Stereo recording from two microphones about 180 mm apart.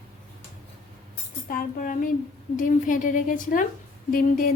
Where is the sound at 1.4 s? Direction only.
50° left (ahead or behind).